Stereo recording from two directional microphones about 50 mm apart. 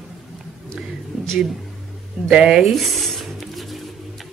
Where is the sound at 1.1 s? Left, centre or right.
Centre.